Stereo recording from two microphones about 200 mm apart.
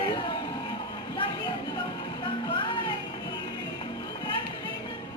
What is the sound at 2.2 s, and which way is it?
Music, 25° left (ahead or behind).